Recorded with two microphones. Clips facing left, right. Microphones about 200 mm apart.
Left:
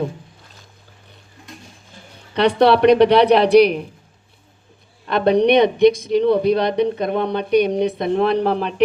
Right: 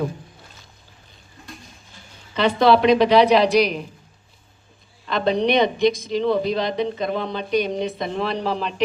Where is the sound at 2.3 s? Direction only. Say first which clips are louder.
Left 2 dB; 65° left (ahead or behind).